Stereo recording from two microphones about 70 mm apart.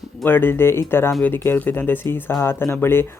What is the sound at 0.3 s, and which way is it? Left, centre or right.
Speech, left.